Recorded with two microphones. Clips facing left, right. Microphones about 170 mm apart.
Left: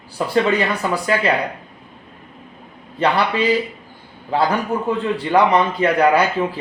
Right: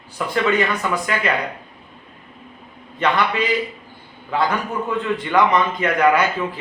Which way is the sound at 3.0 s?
35° left (ahead or behind).